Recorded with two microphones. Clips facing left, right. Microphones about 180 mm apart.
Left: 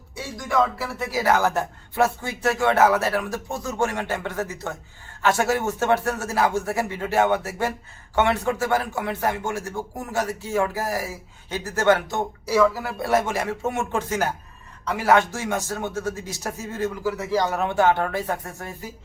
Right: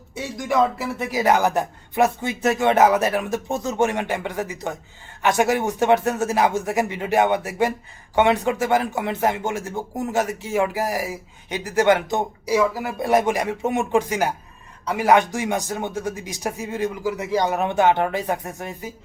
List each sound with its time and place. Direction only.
0.1 s speech: 20° right (ahead or behind)